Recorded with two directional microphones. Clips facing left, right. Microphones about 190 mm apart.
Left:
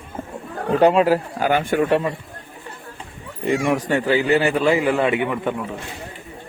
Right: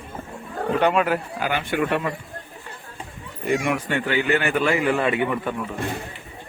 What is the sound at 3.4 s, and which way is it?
Speech, 35° left (ahead or behind).